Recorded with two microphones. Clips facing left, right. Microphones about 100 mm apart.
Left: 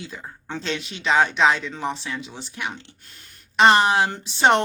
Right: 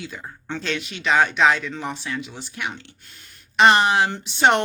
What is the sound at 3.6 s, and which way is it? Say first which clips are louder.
Speech: even; 30° left (ahead or behind).